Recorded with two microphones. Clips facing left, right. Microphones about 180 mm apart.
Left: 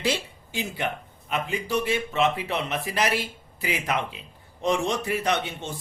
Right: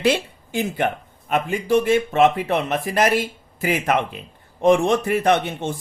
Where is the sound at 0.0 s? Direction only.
55° right (ahead or behind).